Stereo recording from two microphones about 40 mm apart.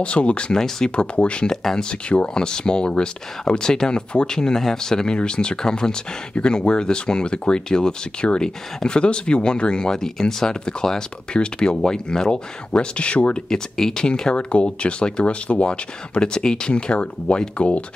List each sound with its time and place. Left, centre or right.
0.0 s speech: left
0.6 s speech: centre
0.9 s speech: left
1.5 s speech: centre
1.9 s speech: left
13.5 s speech: centre
14.3 s speech: left